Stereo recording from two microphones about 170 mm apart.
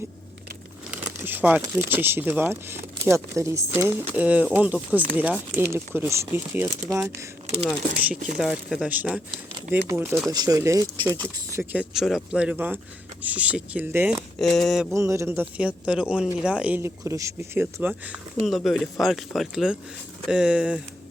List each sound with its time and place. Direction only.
0.9 s crumpling: 10° right (ahead or behind)
1.6 s speech: 10° right (ahead or behind)
8.4 s speech: 5° right (ahead or behind)
10.3 s speech: 25° right (ahead or behind)
14.3 s speech: 5° left (ahead or behind)
14.9 s speech: 15° right (ahead or behind)